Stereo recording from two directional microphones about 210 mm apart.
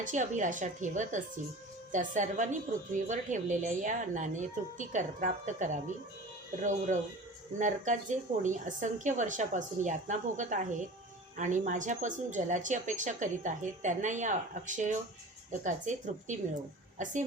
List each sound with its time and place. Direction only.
0.0 s a woman's voice: 35° right (ahead or behind)